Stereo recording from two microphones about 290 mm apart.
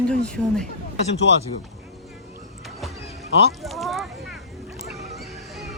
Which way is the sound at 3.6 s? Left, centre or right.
Centre.